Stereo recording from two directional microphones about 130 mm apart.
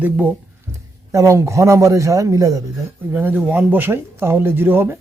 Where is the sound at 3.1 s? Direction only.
15° right (ahead or behind).